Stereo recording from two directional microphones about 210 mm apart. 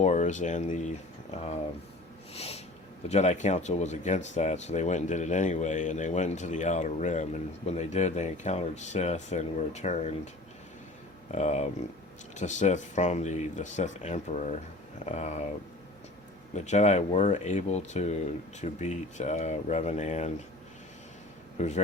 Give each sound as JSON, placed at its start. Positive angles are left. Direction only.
{"t": 0.0, "sound": "speech", "side_deg": 35}
{"t": 2.3, "sound": "snort", "side_deg": 30}
{"t": 3.1, "sound": "speech", "side_deg": 30}
{"t": 11.3, "sound": "speech", "side_deg": 35}
{"t": 16.6, "sound": "speech", "side_deg": 35}